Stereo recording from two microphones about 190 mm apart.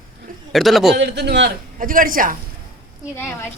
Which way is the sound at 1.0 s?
65° right (ahead or behind).